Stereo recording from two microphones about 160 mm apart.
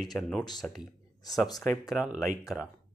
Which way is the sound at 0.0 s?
5° left (ahead or behind).